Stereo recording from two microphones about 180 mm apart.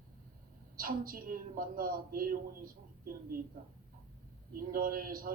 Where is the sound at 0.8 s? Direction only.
50° right (ahead or behind).